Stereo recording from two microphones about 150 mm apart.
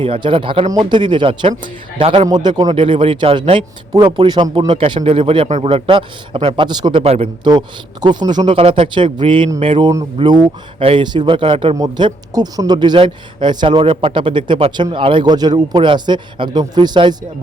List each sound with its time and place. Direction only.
0.0 s speech: 35° right (ahead or behind)
2.3 s speech: 30° right (ahead or behind)
7.0 s speech: 45° right (ahead or behind)
8.0 s speech: 30° right (ahead or behind)